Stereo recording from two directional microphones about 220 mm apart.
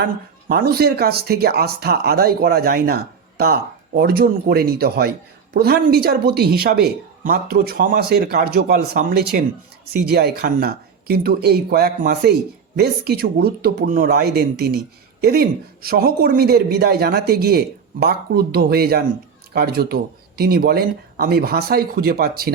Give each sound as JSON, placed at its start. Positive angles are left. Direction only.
{"t": 0.4, "sound": "speech", "side_deg": -45}